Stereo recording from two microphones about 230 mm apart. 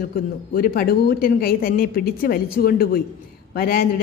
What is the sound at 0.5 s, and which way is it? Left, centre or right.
A woman's voice, left.